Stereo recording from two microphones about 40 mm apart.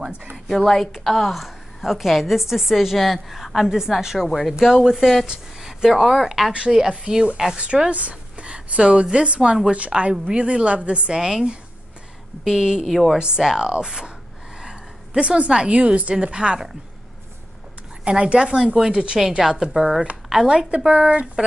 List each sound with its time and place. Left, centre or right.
0.5 s a woman's voice: centre
6.5 s a woman's voice: right
11.1 s speech: centre
12.4 s speech: centre
12.8 s a woman's voice: centre
13.4 s a woman's voice: centre
18.0 s a woman's voice: right